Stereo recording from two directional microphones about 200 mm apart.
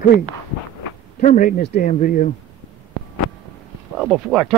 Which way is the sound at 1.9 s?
40° left (ahead or behind).